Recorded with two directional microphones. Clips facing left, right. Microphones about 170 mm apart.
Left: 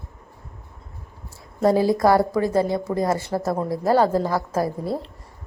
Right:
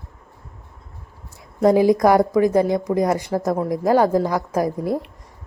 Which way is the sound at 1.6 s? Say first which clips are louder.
Right 3 dB; 15° right (ahead or behind).